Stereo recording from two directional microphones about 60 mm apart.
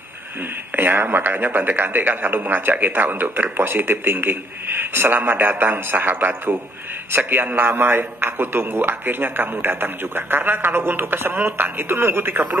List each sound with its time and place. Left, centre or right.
0.7 s a man's voice: right